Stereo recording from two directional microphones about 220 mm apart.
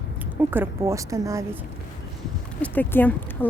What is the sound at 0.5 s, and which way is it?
Speech, 10° right (ahead or behind).